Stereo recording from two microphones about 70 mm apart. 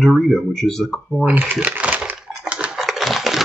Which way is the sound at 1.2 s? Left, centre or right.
Right.